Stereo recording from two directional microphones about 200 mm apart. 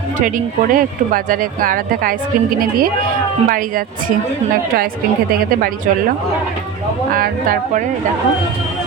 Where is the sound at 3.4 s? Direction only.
45° right (ahead or behind).